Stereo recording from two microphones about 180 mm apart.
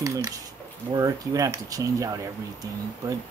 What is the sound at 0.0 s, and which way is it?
Speech, 15° right (ahead or behind).